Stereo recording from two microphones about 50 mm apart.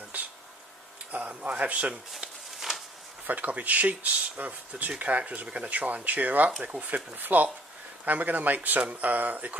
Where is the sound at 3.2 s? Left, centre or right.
Right.